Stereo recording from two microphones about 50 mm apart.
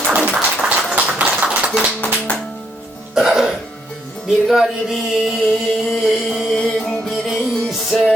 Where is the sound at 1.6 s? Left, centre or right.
Right.